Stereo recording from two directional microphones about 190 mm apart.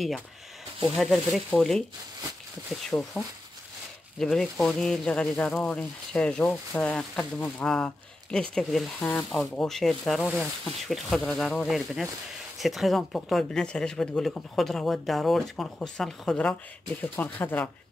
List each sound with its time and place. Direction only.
0.9 s speech: centre (ahead or behind)